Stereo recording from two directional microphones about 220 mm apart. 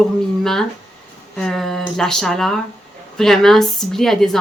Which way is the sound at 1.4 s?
Centre (ahead or behind).